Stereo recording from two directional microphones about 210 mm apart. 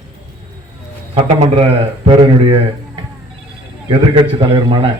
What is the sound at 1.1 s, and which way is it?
A man's voice, 30° right (ahead or behind).